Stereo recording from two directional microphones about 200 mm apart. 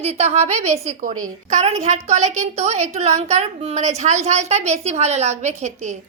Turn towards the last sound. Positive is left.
turn(degrees=-35)  # may be behind; listen again after turning